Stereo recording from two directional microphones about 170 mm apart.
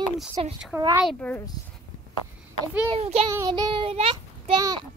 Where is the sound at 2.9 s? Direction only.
35° right (ahead or behind).